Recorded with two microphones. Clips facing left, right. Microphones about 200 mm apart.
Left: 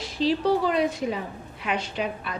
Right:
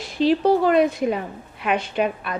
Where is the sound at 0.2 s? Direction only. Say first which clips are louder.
Right 5 dB; 55° right (ahead or behind).